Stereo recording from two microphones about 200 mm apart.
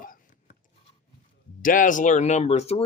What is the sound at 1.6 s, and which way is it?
Speech, 40° left (ahead or behind).